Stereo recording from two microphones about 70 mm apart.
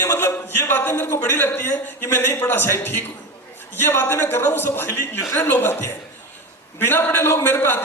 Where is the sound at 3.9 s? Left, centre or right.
Left.